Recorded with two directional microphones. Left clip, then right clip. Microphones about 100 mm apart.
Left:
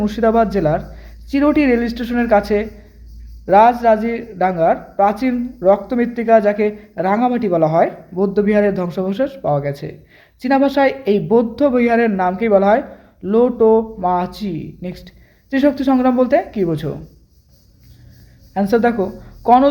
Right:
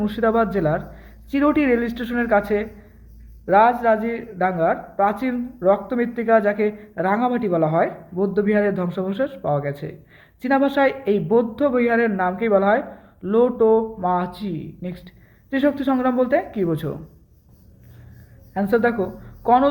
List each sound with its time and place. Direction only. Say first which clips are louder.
0.0 s speech: left 5 dB; 30° left (ahead or behind)
16.6 s speech: left 3 dB; 15° left (ahead or behind)
18.5 s speech: left 4 dB; 30° left (ahead or behind)